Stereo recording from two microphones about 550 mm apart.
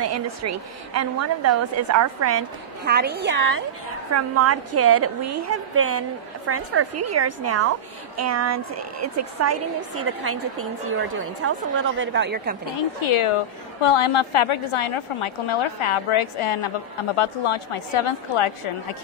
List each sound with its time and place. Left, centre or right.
0.0 s a woman's voice: right
13.0 s a woman's voice: left